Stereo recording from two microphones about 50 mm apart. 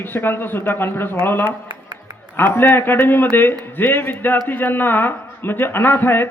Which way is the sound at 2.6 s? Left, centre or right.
Left.